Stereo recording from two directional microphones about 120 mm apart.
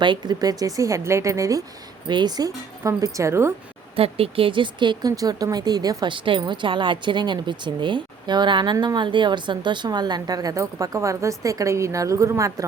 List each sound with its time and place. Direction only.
0.0 s a woman's voice: 40° right (ahead or behind); by 3.5 s 25° right (ahead or behind)
3.9 s speech: 50° right (ahead or behind); by 12.6 s 25° right (ahead or behind)